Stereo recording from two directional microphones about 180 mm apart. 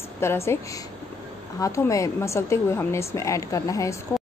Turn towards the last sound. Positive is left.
turn(degrees=20)  # may be behind; listen again after turning